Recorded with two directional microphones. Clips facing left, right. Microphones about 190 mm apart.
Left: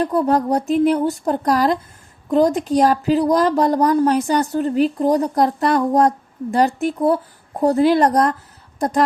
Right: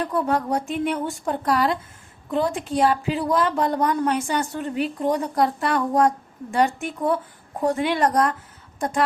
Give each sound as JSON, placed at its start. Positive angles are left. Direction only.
{"t": 0.0, "sound": "a woman's voice", "side_deg": 35}